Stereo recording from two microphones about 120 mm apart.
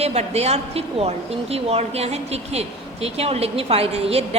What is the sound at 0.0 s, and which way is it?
Speech, 65° right (ahead or behind).